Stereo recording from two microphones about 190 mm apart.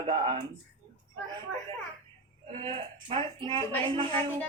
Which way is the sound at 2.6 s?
30° right (ahead or behind).